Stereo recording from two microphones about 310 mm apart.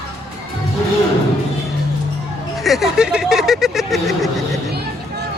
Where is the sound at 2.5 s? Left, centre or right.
Centre.